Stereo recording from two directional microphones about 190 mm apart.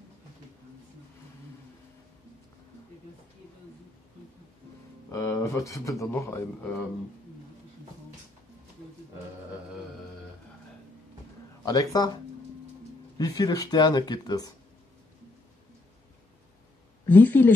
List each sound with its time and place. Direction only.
5.1 s speech: 15° left (ahead or behind)
11.6 s speech: 20° left (ahead or behind)
13.2 s speech: 20° left (ahead or behind)
17.1 s speech: 10° left (ahead or behind)